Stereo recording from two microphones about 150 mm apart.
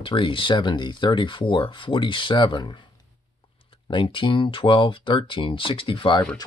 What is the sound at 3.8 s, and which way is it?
Speech, 30° left (ahead or behind).